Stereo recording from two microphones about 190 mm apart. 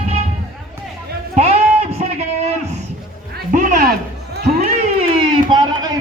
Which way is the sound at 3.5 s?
40° right (ahead or behind).